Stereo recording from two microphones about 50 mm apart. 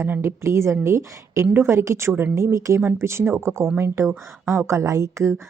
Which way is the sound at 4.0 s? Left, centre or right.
Right.